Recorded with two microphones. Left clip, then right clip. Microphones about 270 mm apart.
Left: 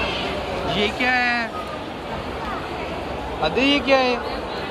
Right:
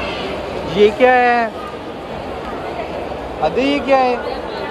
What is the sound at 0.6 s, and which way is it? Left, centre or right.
Speech, centre.